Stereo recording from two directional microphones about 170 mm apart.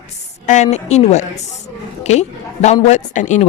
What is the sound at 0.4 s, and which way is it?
Speech, 45° left (ahead or behind).